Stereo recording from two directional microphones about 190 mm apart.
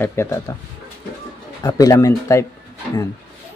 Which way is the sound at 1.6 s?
15° left (ahead or behind).